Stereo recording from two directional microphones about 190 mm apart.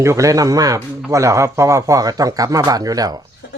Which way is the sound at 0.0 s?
15° right (ahead or behind).